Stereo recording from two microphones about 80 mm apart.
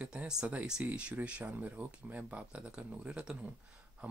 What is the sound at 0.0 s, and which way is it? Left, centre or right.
Speech, centre.